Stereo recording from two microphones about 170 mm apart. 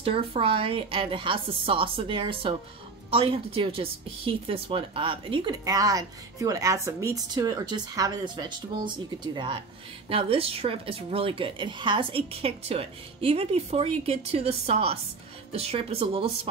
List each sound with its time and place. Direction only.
0.0 s a woman's voice: 35° right (ahead or behind)